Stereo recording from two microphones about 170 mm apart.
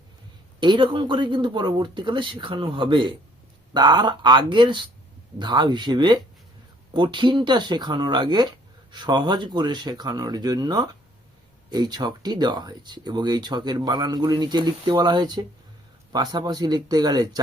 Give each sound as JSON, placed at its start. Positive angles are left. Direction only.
{"t": 0.6, "sound": "speech", "side_deg": -25}